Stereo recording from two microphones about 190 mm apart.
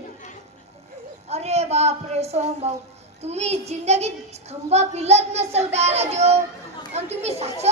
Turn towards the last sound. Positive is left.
turn(degrees=-35)  # may be behind; listen again after turning